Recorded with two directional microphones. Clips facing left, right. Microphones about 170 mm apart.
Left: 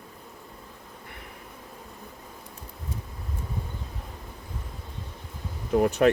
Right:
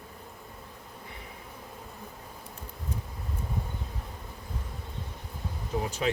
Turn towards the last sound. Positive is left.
turn(degrees=60)  # may be behind; listen again after turning